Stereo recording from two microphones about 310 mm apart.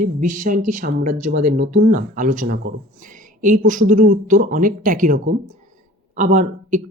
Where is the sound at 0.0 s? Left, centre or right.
Right.